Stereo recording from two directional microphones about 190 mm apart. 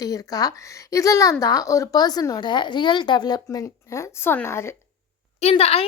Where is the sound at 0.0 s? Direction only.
20° left (ahead or behind).